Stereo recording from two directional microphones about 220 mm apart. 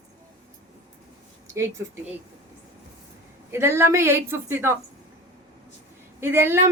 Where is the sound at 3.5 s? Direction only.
10° right (ahead or behind).